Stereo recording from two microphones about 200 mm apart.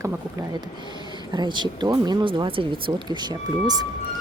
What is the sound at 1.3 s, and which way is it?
Speech, 20° right (ahead or behind).